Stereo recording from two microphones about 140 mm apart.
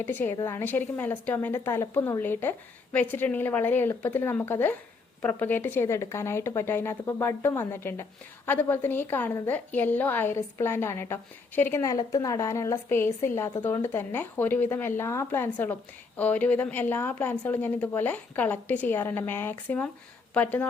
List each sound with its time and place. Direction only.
0.0 s speech: 15° left (ahead or behind)